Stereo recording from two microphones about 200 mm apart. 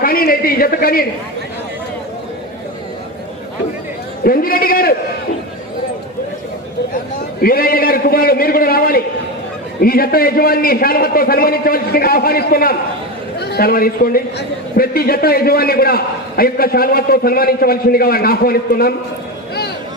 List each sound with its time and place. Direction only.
0.0 s a man's voice: 45° left (ahead or behind)
4.2 s a man's voice: 45° left (ahead or behind)
7.4 s a man's voice: 45° left (ahead or behind)